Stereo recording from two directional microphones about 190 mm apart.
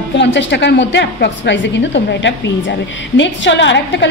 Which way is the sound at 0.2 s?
70° left (ahead or behind).